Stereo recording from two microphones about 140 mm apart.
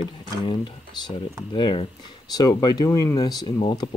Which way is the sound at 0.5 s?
35° left (ahead or behind).